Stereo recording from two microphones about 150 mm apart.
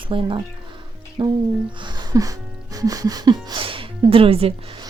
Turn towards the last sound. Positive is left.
turn(degrees=-40)  # may be behind; listen again after turning